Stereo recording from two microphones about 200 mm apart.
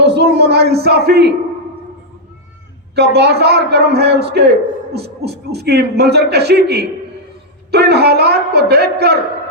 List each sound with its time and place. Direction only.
0.0 s a man's voice: 55° right (ahead or behind)
2.9 s a man's voice: 55° right (ahead or behind)